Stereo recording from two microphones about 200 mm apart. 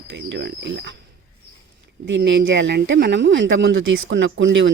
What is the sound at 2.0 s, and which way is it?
Speech, 65° right (ahead or behind).